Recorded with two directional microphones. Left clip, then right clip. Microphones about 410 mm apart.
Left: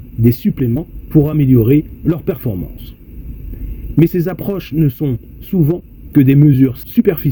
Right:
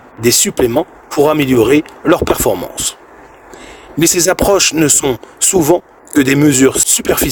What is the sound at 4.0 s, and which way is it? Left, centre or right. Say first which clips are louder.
Speech: right 5 dB; centre.